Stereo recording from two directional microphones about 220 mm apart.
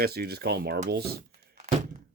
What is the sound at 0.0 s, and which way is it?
Speech, 45° right (ahead or behind).